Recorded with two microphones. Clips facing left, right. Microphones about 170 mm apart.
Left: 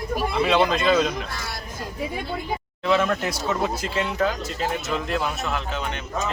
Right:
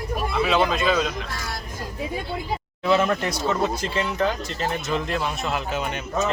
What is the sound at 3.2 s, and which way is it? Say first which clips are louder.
Speech: right 1 dB; 5° left (ahead or behind).